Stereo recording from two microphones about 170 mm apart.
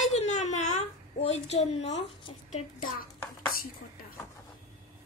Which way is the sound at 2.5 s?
55° left (ahead or behind).